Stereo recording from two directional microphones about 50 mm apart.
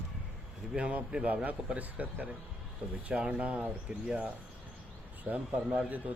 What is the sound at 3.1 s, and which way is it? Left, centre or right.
Speech, right.